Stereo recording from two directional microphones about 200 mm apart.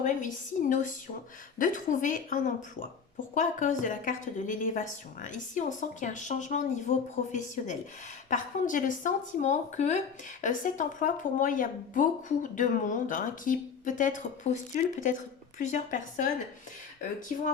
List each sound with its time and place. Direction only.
0.7 s speech: 40° left (ahead or behind)